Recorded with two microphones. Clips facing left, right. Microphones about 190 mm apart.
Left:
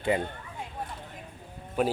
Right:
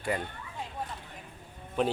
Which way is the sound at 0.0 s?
20° left (ahead or behind).